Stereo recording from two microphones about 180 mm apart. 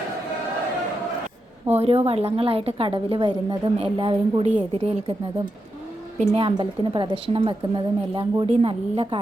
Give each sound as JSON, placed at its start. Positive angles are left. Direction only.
{"t": 1.7, "sound": "a woman's voice", "side_deg": -35}
{"t": 6.1, "sound": "a woman's voice", "side_deg": -30}